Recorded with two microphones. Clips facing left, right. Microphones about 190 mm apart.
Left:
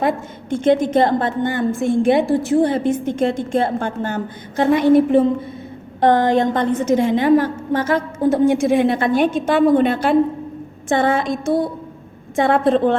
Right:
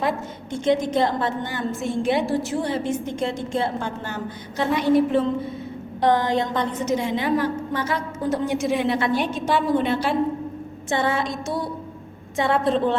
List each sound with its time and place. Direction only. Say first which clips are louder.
0.0 s a woman's voice: left 5 dB; 55° left (ahead or behind)